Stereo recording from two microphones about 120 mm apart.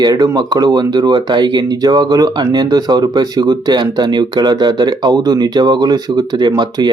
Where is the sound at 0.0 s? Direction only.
30° right (ahead or behind).